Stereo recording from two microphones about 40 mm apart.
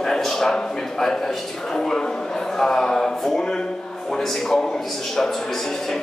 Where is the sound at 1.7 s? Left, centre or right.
Centre.